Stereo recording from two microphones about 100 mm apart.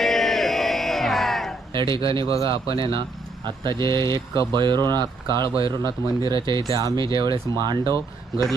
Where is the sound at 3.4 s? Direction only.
50° right (ahead or behind).